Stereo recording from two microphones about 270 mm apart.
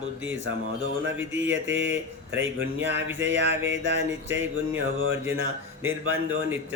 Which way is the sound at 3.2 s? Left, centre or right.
Right.